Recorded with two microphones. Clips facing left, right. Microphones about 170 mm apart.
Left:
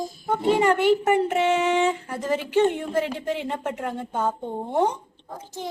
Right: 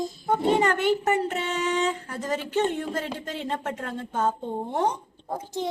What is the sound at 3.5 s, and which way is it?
Speech, 15° left (ahead or behind).